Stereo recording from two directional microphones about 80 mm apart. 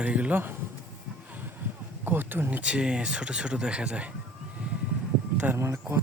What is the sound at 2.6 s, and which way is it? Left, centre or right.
Speech, centre.